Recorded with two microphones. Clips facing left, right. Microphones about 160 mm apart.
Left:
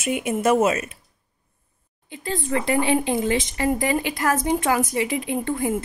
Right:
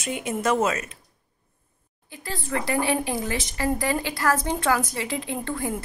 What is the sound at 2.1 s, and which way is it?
A woman's voice, 20° left (ahead or behind).